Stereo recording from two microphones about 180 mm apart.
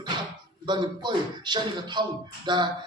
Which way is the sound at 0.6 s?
25° right (ahead or behind).